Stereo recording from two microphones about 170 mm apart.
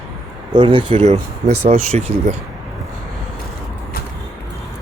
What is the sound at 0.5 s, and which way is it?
Speech, 30° right (ahead or behind).